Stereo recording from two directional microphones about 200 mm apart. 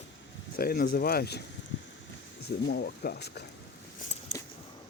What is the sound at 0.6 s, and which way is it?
Speech, 50° left (ahead or behind).